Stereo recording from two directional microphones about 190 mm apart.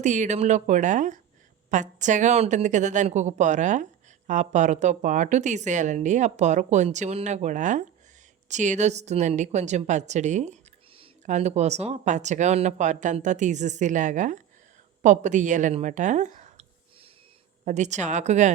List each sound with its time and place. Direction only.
0.0 s a woman's voice: 40° right (ahead or behind)
17.7 s a woman's voice: 40° right (ahead or behind)